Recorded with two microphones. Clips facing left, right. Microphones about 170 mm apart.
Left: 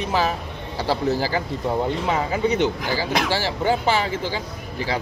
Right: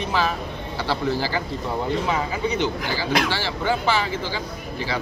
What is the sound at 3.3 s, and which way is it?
Speech, 45° left (ahead or behind).